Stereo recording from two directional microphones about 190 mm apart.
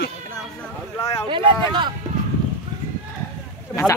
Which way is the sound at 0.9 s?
15° left (ahead or behind).